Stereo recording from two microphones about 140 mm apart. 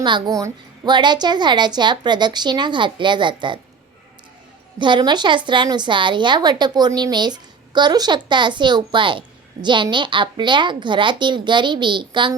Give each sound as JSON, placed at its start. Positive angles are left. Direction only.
{"t": 0.0, "sound": "a woman's voice", "side_deg": -30}
{"t": 4.8, "sound": "a woman's voice", "side_deg": -35}